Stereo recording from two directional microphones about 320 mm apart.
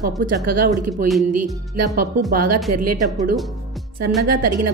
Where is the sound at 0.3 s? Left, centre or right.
Right.